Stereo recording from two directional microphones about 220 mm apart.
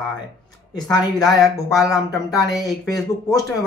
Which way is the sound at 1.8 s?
15° left (ahead or behind).